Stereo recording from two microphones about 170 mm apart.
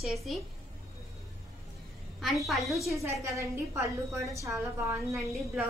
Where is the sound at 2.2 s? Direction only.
Centre (ahead or behind).